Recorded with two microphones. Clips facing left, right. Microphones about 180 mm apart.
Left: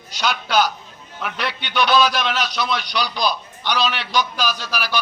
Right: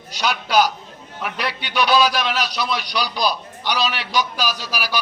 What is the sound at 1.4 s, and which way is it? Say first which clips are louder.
Speech: even; 35° right (ahead or behind).